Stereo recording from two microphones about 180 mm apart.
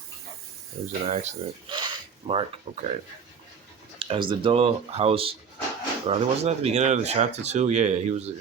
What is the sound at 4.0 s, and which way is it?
Speech, 30° right (ahead or behind).